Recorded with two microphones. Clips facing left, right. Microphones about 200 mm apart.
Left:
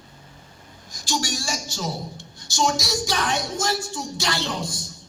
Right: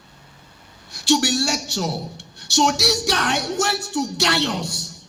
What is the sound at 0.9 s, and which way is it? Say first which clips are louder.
A woman's voice: right 9 dB; 65° right (ahead or behind).